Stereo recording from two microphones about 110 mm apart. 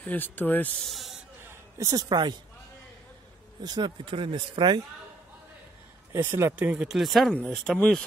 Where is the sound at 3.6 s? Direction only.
40° right (ahead or behind).